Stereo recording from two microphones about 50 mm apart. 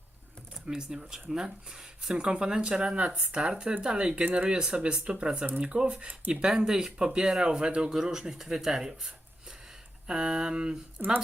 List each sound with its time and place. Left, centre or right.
0.7 s speech: centre
10.1 s speech: centre
11.0 s speech: right